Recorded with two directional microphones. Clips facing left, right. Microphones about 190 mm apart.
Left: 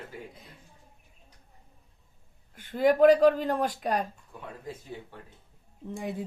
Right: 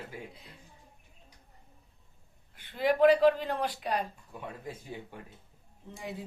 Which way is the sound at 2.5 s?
45° left (ahead or behind).